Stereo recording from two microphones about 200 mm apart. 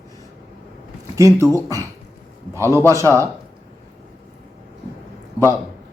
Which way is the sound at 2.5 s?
15° right (ahead or behind).